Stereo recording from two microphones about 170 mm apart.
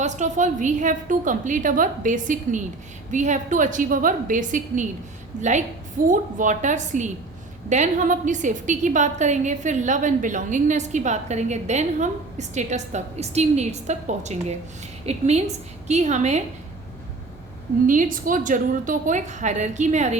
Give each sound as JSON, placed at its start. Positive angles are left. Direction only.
{"t": 0.0, "sound": "a woman's voice", "side_deg": -45}
{"t": 17.8, "sound": "a woman's voice", "side_deg": -50}